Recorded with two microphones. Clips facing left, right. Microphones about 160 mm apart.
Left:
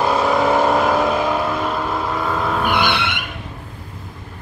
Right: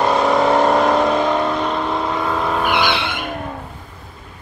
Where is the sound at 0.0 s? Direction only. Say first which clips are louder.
Right 1 dB; centre (ahead or behind).